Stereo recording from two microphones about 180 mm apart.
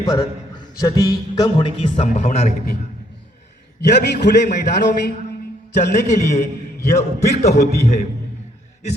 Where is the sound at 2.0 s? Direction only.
40° left (ahead or behind).